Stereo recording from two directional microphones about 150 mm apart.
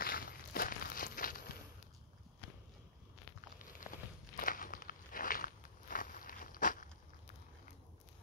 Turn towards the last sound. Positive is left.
turn(degrees=65)  # may be behind; listen again after turning